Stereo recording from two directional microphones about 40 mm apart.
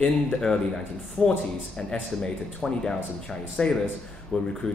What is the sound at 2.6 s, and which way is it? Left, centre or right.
Speech, centre.